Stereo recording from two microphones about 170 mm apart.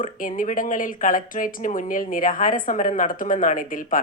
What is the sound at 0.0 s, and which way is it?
Speech, 50° left (ahead or behind).